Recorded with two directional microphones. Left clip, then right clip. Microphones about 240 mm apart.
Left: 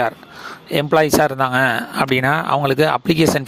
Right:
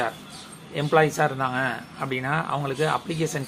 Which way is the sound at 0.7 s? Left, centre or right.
Left.